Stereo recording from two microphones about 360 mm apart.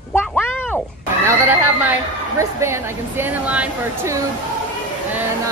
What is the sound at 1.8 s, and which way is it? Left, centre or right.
A woman's voice, centre.